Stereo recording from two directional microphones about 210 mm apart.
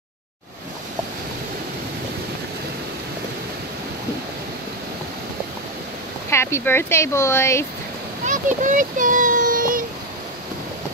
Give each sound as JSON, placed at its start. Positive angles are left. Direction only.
{"t": 6.3, "sound": "speech", "side_deg": 10}
{"t": 8.3, "sound": "child singing", "side_deg": -35}